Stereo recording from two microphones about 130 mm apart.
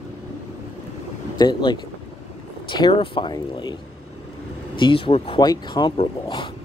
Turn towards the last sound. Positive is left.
turn(degrees=45)  # may be behind; listen again after turning